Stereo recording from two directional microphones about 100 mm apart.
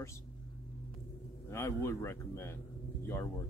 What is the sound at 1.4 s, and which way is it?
A man's voice, 30° left (ahead or behind).